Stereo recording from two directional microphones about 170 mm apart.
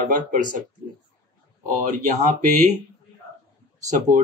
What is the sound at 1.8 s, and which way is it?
Speech, 45° right (ahead or behind).